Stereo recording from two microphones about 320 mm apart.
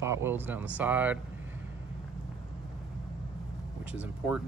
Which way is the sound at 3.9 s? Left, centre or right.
Centre.